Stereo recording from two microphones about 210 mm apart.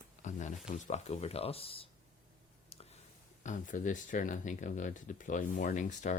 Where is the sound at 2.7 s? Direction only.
30° left (ahead or behind).